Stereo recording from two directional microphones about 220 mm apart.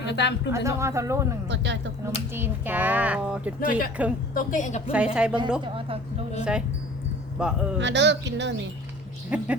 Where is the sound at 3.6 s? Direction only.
40° left (ahead or behind).